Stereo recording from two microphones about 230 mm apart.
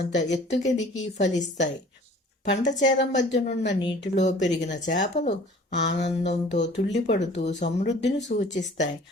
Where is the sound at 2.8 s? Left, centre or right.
Left.